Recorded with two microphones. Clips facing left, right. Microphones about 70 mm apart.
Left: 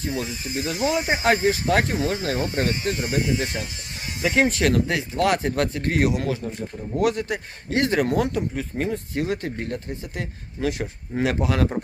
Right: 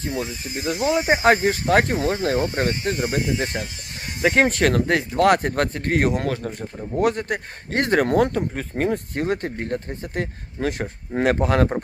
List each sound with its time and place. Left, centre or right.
0.0 s speech: right
7.0 s speech: right